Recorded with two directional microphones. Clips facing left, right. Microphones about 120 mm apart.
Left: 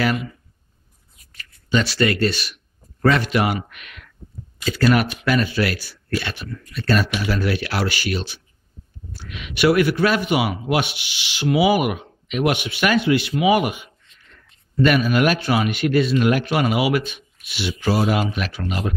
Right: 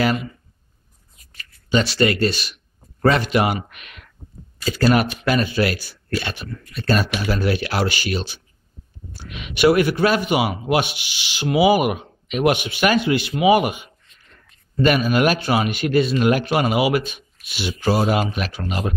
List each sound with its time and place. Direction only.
0.0 s speech: 25° right (ahead or behind)
1.7 s a man's voice: 20° right (ahead or behind)
9.9 s speech: 30° right (ahead or behind)